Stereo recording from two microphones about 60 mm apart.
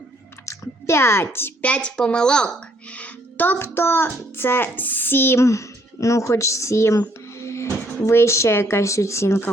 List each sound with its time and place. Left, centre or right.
0.4 s speech: left
1.6 s a woman's voice: centre
2.9 s music: left
3.6 s music: left
5.4 s speech: left
7.3 s music: left
8.0 s speech: left